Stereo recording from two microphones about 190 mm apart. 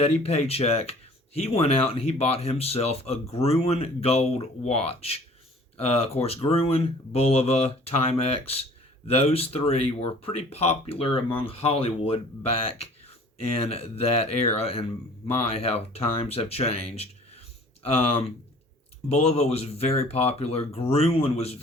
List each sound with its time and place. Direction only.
0.0 s speech: 30° left (ahead or behind)
19.0 s speech: 35° left (ahead or behind)